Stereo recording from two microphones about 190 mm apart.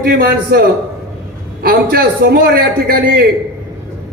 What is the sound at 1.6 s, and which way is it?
A man's voice, 50° right (ahead or behind).